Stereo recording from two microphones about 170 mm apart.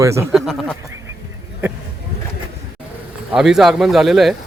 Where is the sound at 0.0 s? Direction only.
15° right (ahead or behind).